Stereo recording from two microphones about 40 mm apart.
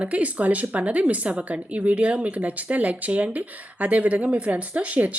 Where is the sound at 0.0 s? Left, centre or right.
Right.